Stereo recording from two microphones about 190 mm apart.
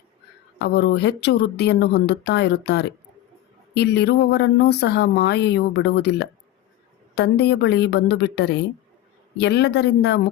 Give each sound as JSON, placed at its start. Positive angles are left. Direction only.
{"t": 0.6, "sound": "speech", "side_deg": 60}